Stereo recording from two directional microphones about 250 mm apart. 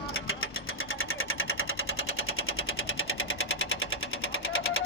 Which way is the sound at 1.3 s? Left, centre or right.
Left.